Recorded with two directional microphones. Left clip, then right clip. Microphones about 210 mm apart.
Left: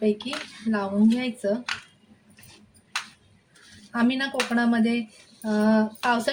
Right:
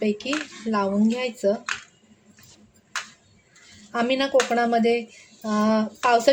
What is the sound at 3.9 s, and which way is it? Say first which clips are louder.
A woman's voice: right 5 dB; 30° right (ahead or behind).